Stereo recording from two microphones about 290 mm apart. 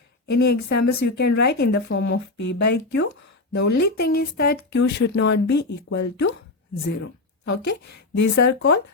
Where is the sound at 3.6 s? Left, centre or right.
Left.